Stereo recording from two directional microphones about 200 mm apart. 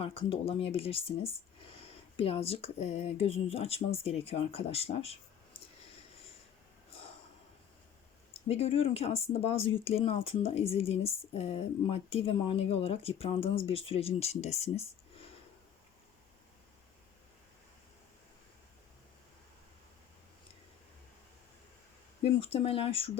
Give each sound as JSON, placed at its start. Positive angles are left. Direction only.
{"t": 0.0, "sound": "speech", "side_deg": 25}
{"t": 8.3, "sound": "speech", "side_deg": 30}
{"t": 22.2, "sound": "speech", "side_deg": 30}